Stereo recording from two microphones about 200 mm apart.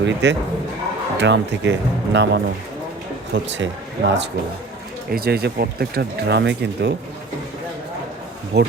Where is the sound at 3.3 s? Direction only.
60° right (ahead or behind).